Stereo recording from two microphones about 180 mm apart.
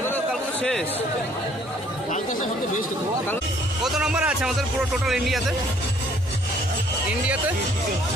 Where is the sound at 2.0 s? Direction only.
45° left (ahead or behind).